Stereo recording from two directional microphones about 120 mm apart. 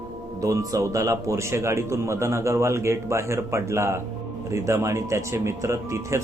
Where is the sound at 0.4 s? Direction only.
25° right (ahead or behind).